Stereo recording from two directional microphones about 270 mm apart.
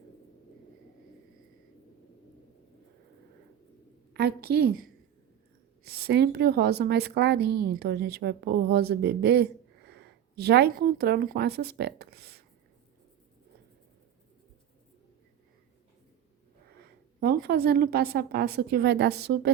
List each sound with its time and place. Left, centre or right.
4.1 s a woman's voice: right
17.2 s a woman's voice: right